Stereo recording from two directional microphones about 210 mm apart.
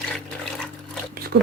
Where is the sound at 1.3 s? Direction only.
55° right (ahead or behind).